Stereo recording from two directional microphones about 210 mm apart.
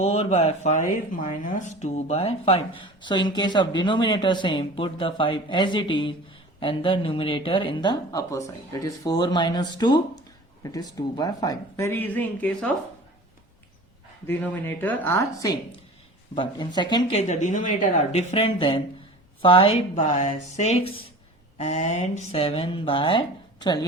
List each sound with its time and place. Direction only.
0.0 s speech: 30° left (ahead or behind); by 12.7 s 5° left (ahead or behind)
14.3 s speech: 10° left (ahead or behind)